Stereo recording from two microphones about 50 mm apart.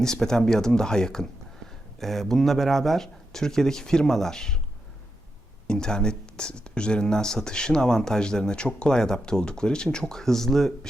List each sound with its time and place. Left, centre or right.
0.0 s speech: centre
5.6 s speech: centre